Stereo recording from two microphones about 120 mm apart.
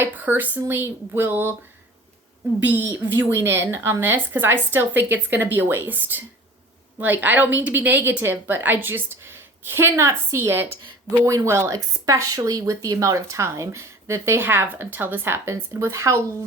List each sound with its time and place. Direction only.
0.0 s a woman's voice: 15° right (ahead or behind)
2.6 s a woman's voice: 15° right (ahead or behind)